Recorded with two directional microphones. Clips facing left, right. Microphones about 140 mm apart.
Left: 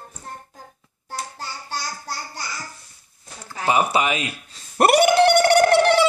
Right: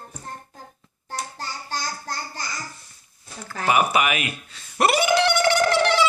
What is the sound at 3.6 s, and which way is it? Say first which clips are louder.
Speech: left 1 dB; 25° left (ahead or behind).